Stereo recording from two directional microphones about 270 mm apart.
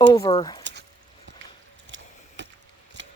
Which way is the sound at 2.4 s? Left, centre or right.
Right.